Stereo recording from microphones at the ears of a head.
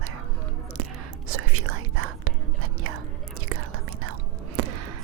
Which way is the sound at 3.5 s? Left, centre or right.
Right.